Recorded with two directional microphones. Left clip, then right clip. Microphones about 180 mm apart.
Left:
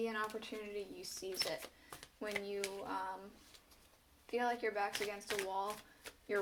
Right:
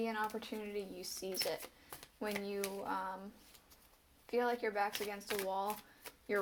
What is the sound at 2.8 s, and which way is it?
Speech, 35° right (ahead or behind).